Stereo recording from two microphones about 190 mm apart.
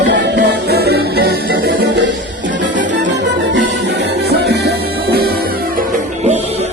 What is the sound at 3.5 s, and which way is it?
Music, 60° right (ahead or behind).